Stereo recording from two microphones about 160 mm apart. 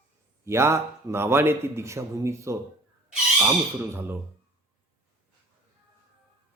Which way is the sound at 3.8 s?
15° right (ahead or behind).